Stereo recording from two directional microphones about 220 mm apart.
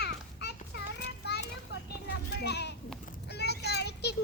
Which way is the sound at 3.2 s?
50° left (ahead or behind).